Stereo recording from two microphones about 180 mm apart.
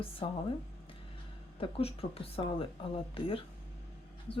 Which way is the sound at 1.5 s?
30° left (ahead or behind).